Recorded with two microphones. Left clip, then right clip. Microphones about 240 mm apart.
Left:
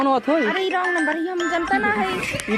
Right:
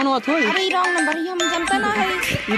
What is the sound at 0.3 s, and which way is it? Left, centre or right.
Speech, right.